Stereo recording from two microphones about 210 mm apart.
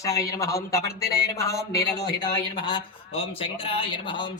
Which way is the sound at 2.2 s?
20° left (ahead or behind).